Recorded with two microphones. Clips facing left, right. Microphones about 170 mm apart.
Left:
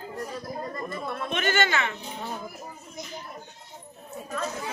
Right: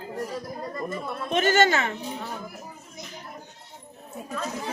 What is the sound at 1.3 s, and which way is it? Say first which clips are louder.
Speech: right 6 dB; 40° right (ahead or behind).